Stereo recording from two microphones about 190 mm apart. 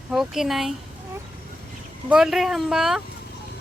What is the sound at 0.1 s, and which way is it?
Speech, centre (ahead or behind).